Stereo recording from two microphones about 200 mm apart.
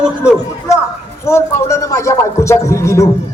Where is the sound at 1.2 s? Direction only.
15° left (ahead or behind).